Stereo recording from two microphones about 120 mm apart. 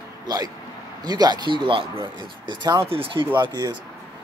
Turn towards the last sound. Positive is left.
turn(degrees=-35)  # may be behind; listen again after turning